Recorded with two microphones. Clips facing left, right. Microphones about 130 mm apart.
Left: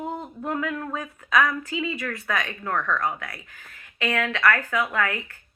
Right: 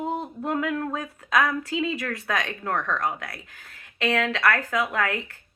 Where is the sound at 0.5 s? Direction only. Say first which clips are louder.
Right 2 dB; 55° right (ahead or behind).